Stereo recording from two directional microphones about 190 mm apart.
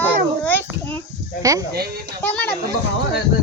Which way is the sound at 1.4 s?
20° right (ahead or behind).